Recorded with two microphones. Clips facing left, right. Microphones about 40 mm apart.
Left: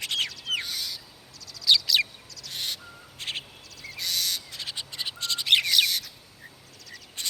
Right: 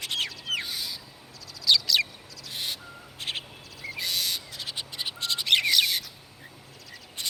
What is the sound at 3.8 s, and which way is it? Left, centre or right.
Owl, right.